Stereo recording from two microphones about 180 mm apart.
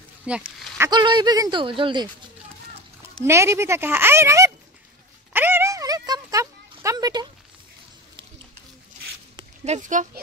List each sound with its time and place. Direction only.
0.3 s a woman's voice: 5° right (ahead or behind)
0.7 s speech: 25° right (ahead or behind)
3.3 s a woman's voice: 15° right (ahead or behind)
5.3 s a sound: 10° right (ahead or behind)
9.7 s a child's voice: 45° right (ahead or behind)